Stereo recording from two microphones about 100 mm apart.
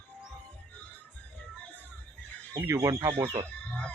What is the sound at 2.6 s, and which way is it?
Speech, 30° right (ahead or behind).